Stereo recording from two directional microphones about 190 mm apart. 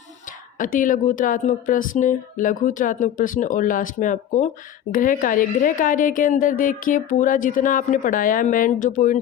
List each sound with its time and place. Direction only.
0.6 s speech: 45° left (ahead or behind)